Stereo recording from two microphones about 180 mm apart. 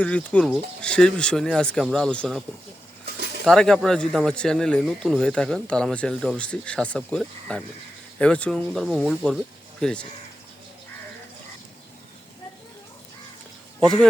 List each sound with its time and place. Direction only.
0.0 s speech: 5° left (ahead or behind)
3.4 s speech: 5° left (ahead or behind)
13.7 s speech: centre (ahead or behind)